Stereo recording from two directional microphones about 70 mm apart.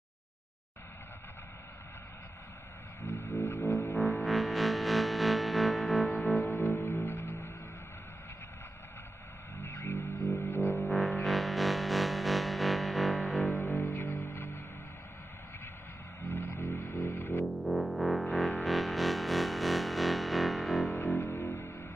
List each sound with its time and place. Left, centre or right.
3.1 s music: left
4.2 s music: centre
6.5 s music: left
9.6 s music: left
10.9 s music: centre
13.5 s music: left
16.2 s music: left
17.6 s music: centre
21.2 s music: left